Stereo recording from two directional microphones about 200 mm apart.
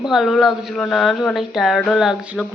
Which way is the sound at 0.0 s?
Centre (ahead or behind).